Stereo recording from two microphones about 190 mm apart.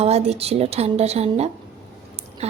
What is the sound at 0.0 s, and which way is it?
A woman's voice, 35° right (ahead or behind).